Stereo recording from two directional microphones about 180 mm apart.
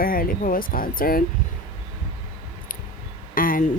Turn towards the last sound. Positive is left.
turn(degrees=50)  # may be behind; listen again after turning